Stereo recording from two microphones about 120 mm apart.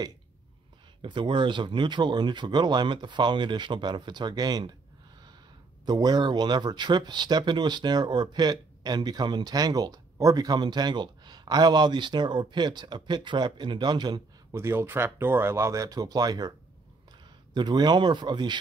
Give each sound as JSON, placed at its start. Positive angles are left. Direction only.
{"t": 1.0, "sound": "speech", "side_deg": -40}
{"t": 5.9, "sound": "speech", "side_deg": -35}
{"t": 14.5, "sound": "speech", "side_deg": -20}
{"t": 17.6, "sound": "speech", "side_deg": -35}